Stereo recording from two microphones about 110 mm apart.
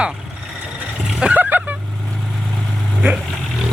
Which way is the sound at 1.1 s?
10° right (ahead or behind).